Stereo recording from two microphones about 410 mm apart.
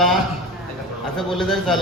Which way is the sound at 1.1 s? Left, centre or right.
Centre.